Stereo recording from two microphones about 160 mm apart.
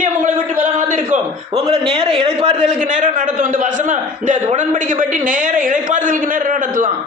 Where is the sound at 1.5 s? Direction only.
35° right (ahead or behind).